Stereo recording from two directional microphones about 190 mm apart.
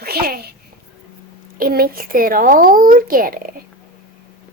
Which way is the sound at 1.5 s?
50° right (ahead or behind).